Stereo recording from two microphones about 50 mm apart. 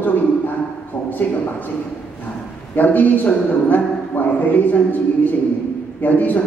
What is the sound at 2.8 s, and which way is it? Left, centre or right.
A man's voice, left.